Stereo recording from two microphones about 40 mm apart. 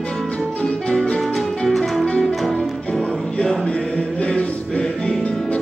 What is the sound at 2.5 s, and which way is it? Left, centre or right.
Music, left.